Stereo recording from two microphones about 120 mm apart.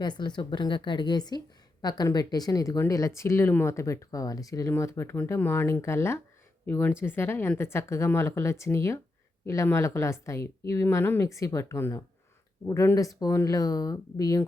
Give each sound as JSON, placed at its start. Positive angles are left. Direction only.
{"t": 0.0, "sound": "a woman's voice", "side_deg": 40}